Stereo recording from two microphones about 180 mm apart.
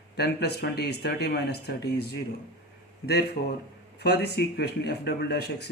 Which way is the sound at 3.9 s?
65° left (ahead or behind).